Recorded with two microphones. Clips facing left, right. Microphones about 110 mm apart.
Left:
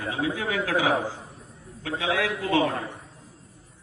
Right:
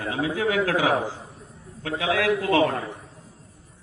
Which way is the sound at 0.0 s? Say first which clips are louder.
Right 3 dB; 50° right (ahead or behind).